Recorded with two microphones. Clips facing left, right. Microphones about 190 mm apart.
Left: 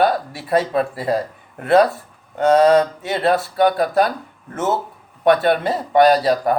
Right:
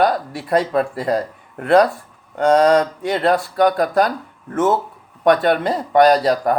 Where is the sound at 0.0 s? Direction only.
25° left (ahead or behind).